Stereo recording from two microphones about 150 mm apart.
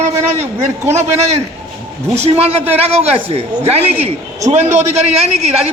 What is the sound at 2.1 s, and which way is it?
A woman's voice, 45° right (ahead or behind).